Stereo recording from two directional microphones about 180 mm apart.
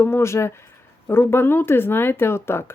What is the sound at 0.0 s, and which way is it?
Speech, 15° left (ahead or behind).